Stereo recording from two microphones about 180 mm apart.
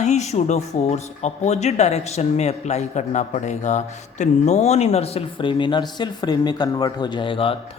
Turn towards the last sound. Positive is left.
turn(degrees=30)  # may be behind; listen again after turning